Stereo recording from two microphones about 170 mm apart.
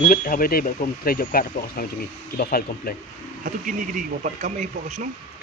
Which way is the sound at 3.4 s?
50° right (ahead or behind).